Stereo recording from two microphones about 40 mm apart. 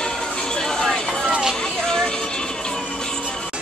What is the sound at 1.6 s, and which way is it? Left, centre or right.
Music, centre.